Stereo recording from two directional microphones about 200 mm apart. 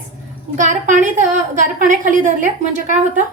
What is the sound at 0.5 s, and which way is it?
A woman's voice, 40° right (ahead or behind).